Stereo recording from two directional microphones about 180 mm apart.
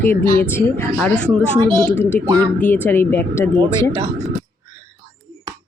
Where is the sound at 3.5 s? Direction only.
25° right (ahead or behind).